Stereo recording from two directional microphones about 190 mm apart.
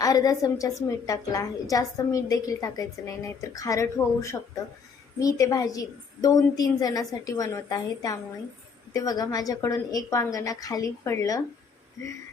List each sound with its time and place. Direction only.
0.0 s a woman's voice: 20° left (ahead or behind)